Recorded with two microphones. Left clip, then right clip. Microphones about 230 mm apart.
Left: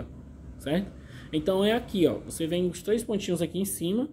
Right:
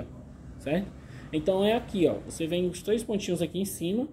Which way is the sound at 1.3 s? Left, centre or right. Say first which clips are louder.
Even; centre.